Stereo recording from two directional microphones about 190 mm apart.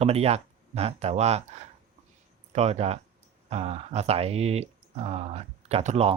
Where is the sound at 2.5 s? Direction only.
35° right (ahead or behind).